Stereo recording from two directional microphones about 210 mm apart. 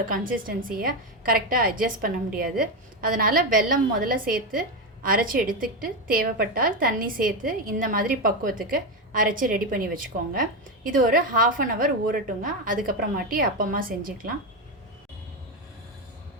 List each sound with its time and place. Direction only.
0.1 s a woman's voice: 40° right (ahead or behind)